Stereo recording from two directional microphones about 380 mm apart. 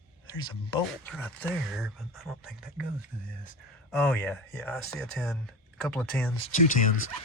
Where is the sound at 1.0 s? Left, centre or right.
Centre.